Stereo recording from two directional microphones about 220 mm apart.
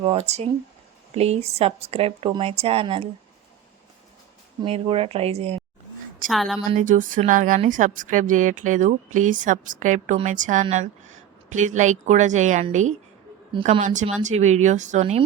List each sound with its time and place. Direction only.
0.0 s speech: 25° right (ahead or behind)
4.6 s speech: 25° right (ahead or behind)
6.2 s a woman's voice: centre (ahead or behind)
6.7 s a woman's voice: 35° right (ahead or behind)